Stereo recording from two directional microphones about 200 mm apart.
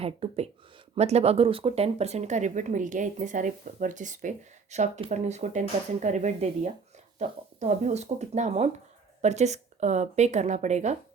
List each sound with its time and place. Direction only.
0.0 s speech: 30° right (ahead or behind)